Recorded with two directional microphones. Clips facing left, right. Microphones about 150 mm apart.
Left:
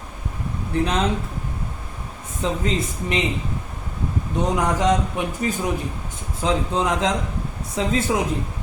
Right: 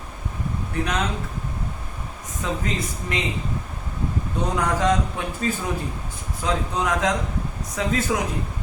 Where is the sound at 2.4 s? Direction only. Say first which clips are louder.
Left 3 dB; 25° left (ahead or behind).